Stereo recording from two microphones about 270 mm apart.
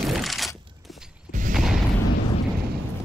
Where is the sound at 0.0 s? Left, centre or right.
Centre.